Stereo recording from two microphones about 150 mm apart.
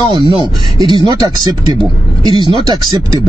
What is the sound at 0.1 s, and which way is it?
Speech, 35° right (ahead or behind).